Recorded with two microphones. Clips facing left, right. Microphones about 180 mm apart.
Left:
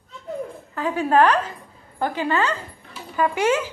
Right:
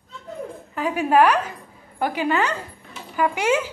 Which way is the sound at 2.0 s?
15° right (ahead or behind).